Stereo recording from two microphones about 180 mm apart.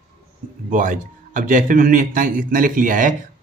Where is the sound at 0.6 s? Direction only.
45° right (ahead or behind).